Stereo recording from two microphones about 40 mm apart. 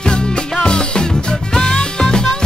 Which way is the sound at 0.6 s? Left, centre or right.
Left.